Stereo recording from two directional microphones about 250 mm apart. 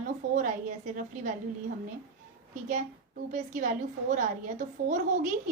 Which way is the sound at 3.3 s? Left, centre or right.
Right.